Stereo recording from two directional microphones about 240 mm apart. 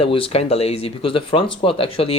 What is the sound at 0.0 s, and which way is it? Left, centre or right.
Speech, left.